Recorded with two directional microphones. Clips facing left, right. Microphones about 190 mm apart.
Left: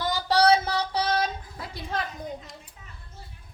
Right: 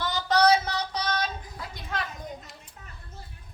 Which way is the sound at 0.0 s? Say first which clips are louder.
Left 1 dB; 30° left (ahead or behind).